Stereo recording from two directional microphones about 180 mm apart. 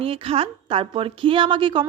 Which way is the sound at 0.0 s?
30° right (ahead or behind).